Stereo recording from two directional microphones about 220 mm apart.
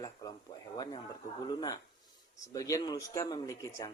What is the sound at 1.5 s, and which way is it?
Speech, 20° left (ahead or behind).